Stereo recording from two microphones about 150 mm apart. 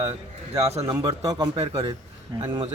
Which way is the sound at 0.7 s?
45° right (ahead or behind).